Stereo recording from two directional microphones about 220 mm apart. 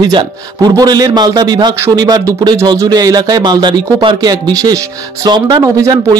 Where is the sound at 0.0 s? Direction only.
20° right (ahead or behind).